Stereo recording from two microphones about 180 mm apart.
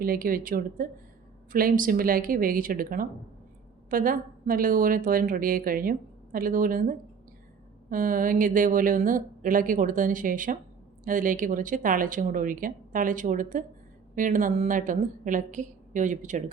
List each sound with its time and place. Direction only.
0.0 s a woman's voice: 50° right (ahead or behind)